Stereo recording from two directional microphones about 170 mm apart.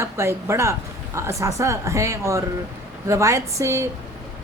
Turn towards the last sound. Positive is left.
turn(degrees=-15)  # may be behind; listen again after turning